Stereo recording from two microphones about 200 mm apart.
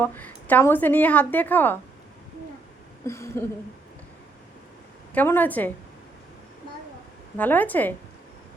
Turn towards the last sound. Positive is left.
turn(degrees=10)  # may be behind; listen again after turning